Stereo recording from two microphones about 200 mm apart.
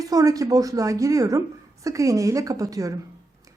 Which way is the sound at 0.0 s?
15° right (ahead or behind).